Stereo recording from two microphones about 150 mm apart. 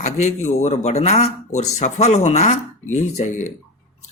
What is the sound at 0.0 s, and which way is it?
Speech, 50° left (ahead or behind).